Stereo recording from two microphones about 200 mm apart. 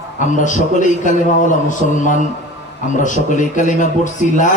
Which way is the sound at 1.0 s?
40° left (ahead or behind).